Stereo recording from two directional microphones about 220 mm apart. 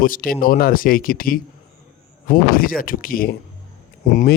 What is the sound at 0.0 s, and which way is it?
Speech, 40° left (ahead or behind).